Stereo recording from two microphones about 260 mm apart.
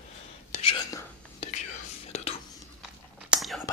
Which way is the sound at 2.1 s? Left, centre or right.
Left.